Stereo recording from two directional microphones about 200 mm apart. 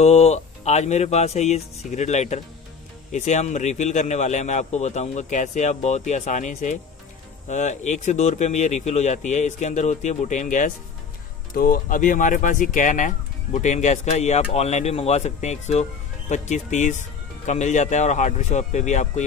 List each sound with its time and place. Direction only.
0.0 s speech: 30° left (ahead or behind)